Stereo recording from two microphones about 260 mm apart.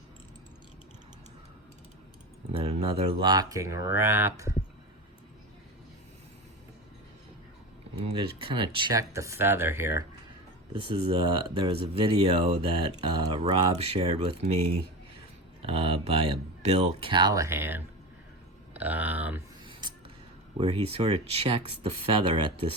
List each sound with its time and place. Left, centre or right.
2.5 s speech: right
7.9 s speech: right
10.8 s speech: right
20.6 s speech: right